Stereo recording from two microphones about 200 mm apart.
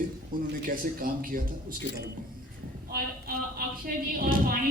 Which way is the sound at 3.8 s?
45° right (ahead or behind).